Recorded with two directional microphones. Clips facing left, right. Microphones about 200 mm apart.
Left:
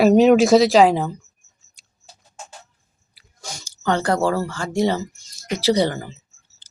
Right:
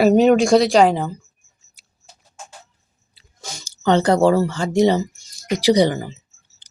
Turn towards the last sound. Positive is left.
turn(degrees=-15)  # may be behind; listen again after turning